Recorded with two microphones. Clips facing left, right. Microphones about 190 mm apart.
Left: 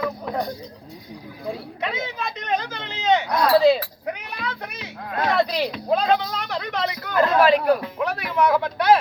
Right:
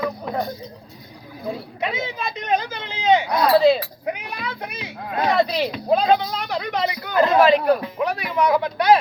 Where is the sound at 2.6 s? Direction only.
10° right (ahead or behind).